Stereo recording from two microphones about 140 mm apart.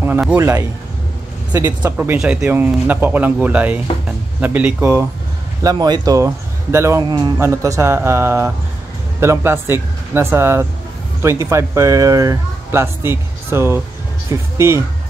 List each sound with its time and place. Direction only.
0.4 s speech: 20° right (ahead or behind)
5.6 s speech: 25° right (ahead or behind)
7.3 s speech: 20° right (ahead or behind)